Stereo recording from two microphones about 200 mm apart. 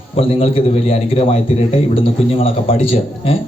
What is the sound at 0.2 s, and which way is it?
A man's voice, 25° left (ahead or behind).